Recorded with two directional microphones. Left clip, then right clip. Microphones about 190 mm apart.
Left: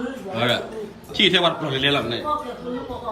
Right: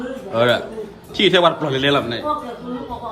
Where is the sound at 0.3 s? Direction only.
10° right (ahead or behind).